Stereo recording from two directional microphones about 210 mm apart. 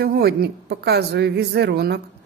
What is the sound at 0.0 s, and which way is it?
Speech, 50° right (ahead or behind).